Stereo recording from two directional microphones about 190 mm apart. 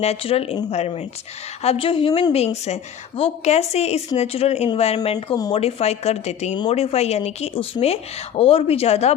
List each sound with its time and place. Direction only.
0.0 s a woman's voice: 30° left (ahead or behind)